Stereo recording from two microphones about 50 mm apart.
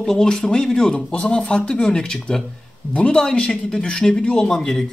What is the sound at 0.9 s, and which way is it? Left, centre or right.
Speech, left.